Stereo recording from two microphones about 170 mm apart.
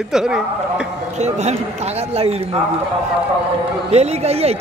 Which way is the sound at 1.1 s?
40° right (ahead or behind).